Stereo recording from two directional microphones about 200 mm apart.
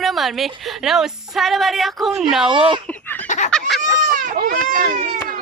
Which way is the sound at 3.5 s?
Centre (ahead or behind).